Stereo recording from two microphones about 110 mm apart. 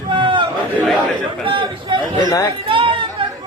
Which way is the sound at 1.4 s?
50° right (ahead or behind).